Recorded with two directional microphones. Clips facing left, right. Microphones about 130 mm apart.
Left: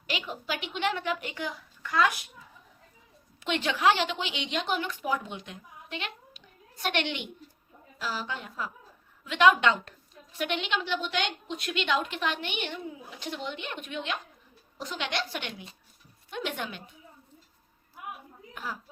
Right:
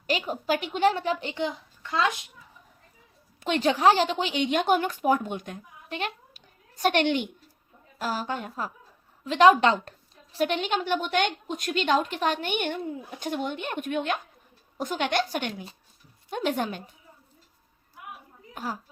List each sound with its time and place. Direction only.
0.1 s a woman's voice: 40° right (ahead or behind); by 2.2 s 25° right (ahead or behind)
3.4 s a woman's voice: 40° right (ahead or behind)
18.5 s a woman's voice: 40° right (ahead or behind)